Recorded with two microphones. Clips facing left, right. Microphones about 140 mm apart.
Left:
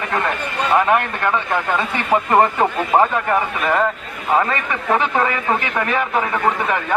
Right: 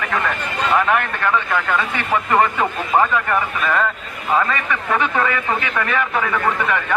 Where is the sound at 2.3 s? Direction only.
30° left (ahead or behind).